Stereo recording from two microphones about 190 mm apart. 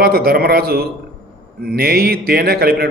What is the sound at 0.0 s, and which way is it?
A man's voice, 55° right (ahead or behind).